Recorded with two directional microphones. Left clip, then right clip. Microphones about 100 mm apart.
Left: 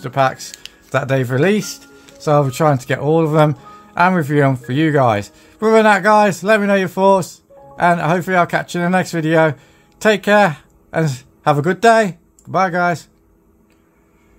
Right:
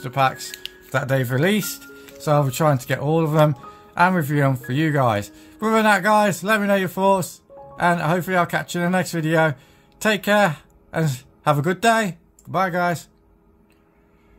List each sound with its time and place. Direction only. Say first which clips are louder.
0.0 s speech: left 4 dB; 40° left (ahead or behind)
1.6 s speech: left 3 dB; 20° left (ahead or behind); by 13.1 s 45° left (ahead or behind)